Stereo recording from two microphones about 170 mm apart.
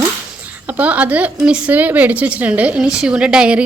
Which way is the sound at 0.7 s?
10° right (ahead or behind).